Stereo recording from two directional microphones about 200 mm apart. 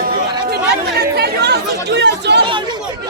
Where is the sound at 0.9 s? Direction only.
55° right (ahead or behind).